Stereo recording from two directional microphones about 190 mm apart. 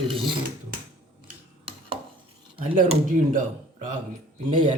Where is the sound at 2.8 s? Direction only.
45° right (ahead or behind).